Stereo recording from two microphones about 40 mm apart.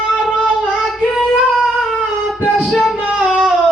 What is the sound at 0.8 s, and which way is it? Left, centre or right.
Child singing, centre.